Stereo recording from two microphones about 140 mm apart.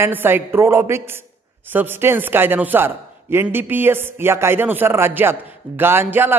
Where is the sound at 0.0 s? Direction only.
15° right (ahead or behind).